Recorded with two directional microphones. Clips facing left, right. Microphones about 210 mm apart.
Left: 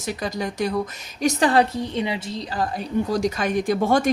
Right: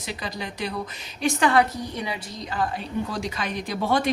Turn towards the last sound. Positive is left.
turn(degrees=45)  # may be behind; listen again after turning